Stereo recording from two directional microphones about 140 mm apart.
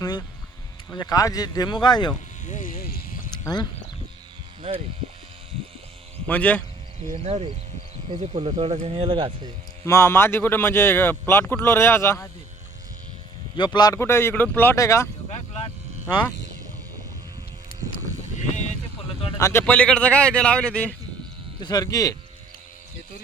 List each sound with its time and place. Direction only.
0.0 s a sound: 30° left (ahead or behind)
0.9 s speech: 25° left (ahead or behind)
2.4 s speech: 65° left (ahead or behind); by 3.2 s 90° left
3.3 s speech: 30° left (ahead or behind)
6.2 s speech: 10° left (ahead or behind)
7.3 s speech: 45° right (ahead or behind)
9.8 s speech: 20° left (ahead or behind)
13.6 s speech: 30° left (ahead or behind)
15.3 s vehicle: 50° left (ahead or behind)
19.4 s a man's voice: 20° left (ahead or behind)
19.6 s speech: 10° left (ahead or behind)
21.6 s speech: 25° left (ahead or behind)